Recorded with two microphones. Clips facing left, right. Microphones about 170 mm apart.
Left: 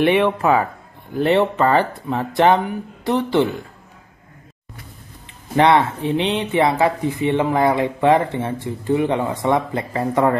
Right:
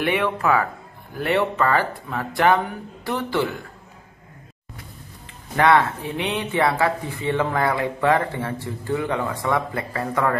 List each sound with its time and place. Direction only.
0.0 s speech: 25° left (ahead or behind)
5.6 s speech: 20° left (ahead or behind)